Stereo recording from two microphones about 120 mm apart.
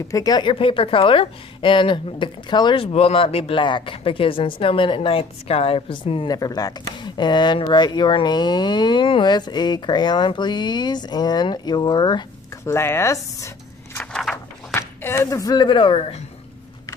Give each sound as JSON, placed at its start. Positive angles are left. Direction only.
{"t": 0.1, "sound": "speech", "side_deg": 30}
{"t": 0.5, "sound": "a woman's voice", "side_deg": 45}
{"t": 6.2, "sound": "speech", "side_deg": 35}
{"t": 12.7, "sound": "speech", "side_deg": 20}
{"t": 14.3, "sound": "a sound", "side_deg": 20}